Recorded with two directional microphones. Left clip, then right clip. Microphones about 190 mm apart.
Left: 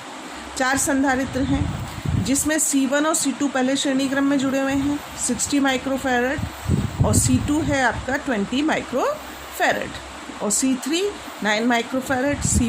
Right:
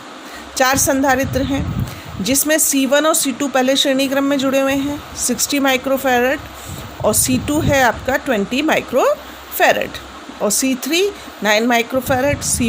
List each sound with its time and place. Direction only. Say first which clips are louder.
0.5 s speech: right 6 dB; 40° right (ahead or behind)